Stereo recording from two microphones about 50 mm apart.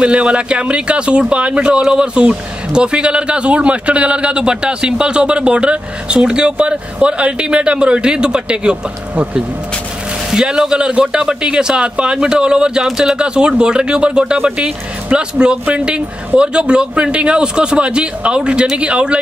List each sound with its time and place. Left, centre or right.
0.0 s a man's voice: right
9.1 s speech: right
10.3 s a man's voice: centre